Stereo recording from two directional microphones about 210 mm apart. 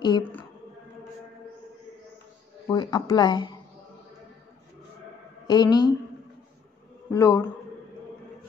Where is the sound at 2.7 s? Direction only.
20° left (ahead or behind).